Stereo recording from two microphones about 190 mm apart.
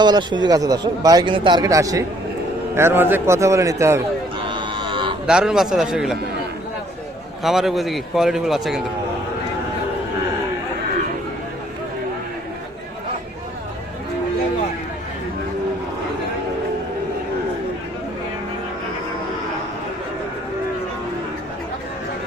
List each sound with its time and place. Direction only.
0.0 s a man's voice: 25° right (ahead or behind)
4.4 s a sound: 25° right (ahead or behind)
5.2 s speech: 5° right (ahead or behind)
7.4 s speech: centre (ahead or behind)